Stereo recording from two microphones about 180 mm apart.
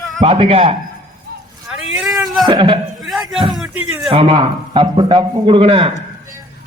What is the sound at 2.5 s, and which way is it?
Speech, 30° right (ahead or behind).